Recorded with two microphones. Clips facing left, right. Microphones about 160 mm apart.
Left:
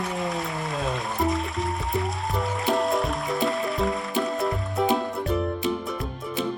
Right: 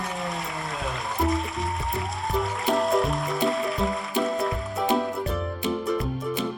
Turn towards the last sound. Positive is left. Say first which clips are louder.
# right 2 dB
turn(degrees=0)  # may be behind; listen again after turning